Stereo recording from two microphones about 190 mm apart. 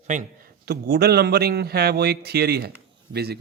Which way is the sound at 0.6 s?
60° right (ahead or behind).